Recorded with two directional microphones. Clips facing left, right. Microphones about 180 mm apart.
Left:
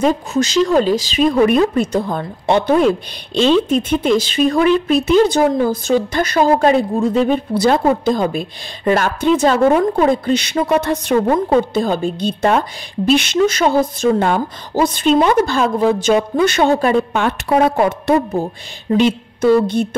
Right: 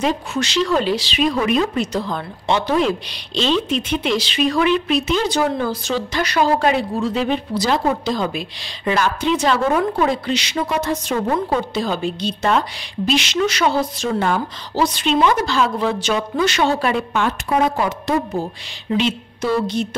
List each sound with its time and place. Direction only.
0.0 s a woman's voice: 45° left (ahead or behind)
9.7 s a woman's voice: 30° left (ahead or behind)
10.0 s a woman's voice: 50° left (ahead or behind)
10.7 s a woman's voice: 65° left (ahead or behind)
11.7 s a woman's voice: 50° left (ahead or behind)